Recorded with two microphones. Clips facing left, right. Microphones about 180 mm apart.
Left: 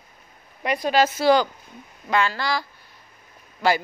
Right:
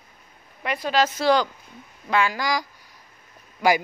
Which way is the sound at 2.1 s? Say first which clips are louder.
Even; 10° right (ahead or behind).